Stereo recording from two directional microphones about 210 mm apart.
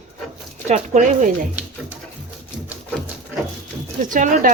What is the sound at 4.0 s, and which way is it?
Speech, 40° right (ahead or behind).